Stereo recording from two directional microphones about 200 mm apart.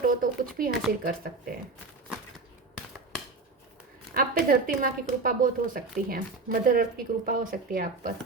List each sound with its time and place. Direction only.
0.0 s speech: 45° right (ahead or behind)
0.7 s speech: centre (ahead or behind)
1.0 s speech: 45° right (ahead or behind)
4.1 s speech: 45° right (ahead or behind)